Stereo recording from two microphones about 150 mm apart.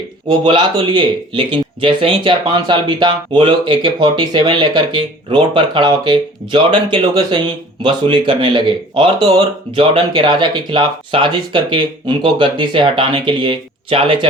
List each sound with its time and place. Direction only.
0.3 s speech: 30° right (ahead or behind)